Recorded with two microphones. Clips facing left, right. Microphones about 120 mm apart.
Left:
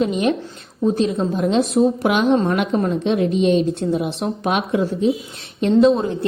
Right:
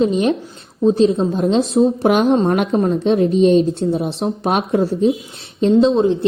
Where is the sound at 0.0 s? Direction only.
35° right (ahead or behind).